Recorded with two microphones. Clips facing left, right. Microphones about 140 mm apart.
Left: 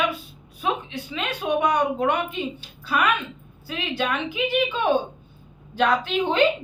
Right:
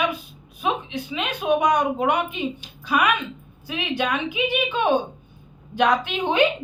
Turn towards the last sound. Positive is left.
turn(degrees=-15)  # may be behind; listen again after turning